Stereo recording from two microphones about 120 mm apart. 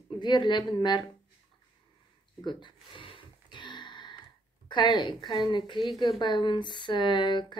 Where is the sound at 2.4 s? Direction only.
40° left (ahead or behind).